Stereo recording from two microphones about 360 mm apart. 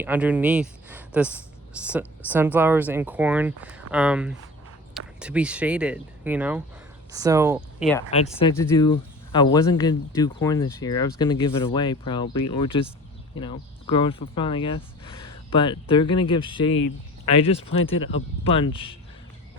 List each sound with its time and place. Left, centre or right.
0.0 s speech: centre
7.9 s speech: centre
17.9 s speech: left
18.4 s speech: centre